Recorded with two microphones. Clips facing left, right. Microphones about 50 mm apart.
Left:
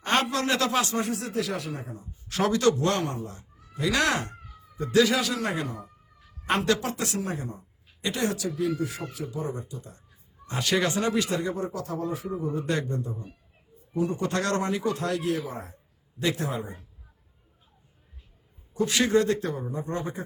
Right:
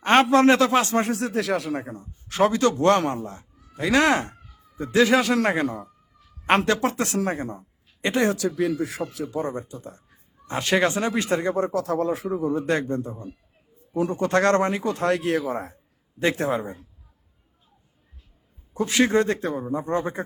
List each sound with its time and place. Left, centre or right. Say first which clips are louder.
0.0 s speech: right 9 dB; right
0.9 s speech: right 5 dB; right
2.3 s speech: right 3 dB; right
5.4 s speech: right 7 dB; right
8.4 s speech: right 4 dB; right
11.6 s speech: right 7 dB; right
12.5 s speech: right 4 dB; right
12.7 s speech: right 5 dB; right
15.4 s speech: right 7 dB; right
16.1 s speech: right 5 dB; right
18.7 s speech: right 2 dB; right